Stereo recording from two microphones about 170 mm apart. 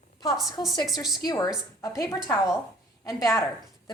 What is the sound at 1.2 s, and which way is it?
Speech, 25° left (ahead or behind).